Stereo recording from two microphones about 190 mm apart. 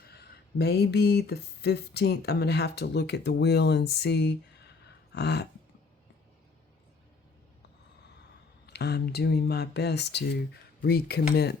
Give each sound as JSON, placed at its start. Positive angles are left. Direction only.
{"t": 0.0, "sound": "speech", "side_deg": 55}
{"t": 8.6, "sound": "speech", "side_deg": 60}